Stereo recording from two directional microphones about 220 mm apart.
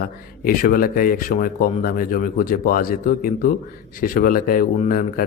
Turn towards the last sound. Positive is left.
turn(degrees=40)  # may be behind; listen again after turning